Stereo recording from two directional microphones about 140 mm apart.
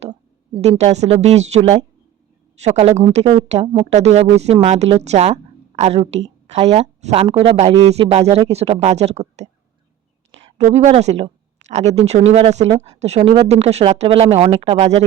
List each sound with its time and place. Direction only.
0.6 s a woman's voice: 50° right (ahead or behind)
10.7 s speech: 50° right (ahead or behind)